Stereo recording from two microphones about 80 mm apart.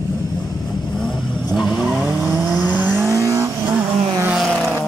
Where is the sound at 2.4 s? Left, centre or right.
Right.